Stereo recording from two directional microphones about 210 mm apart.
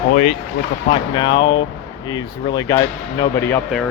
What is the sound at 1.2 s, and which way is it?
Speech, 25° left (ahead or behind).